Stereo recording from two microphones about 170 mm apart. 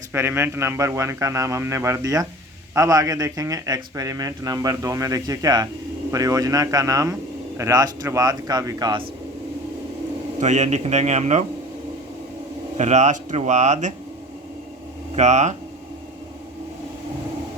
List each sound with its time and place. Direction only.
0.1 s a man's voice: 15° right (ahead or behind)
10.4 s speech: 45° right (ahead or behind)
12.7 s speech: 45° right (ahead or behind)
15.1 s speech: 45° right (ahead or behind)